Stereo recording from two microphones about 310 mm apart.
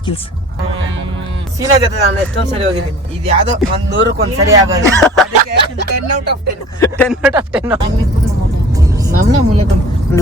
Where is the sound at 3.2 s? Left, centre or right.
Right.